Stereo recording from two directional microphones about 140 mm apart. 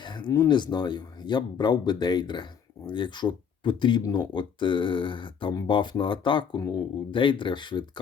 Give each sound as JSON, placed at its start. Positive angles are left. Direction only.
{"t": 0.0, "sound": "speech", "side_deg": 35}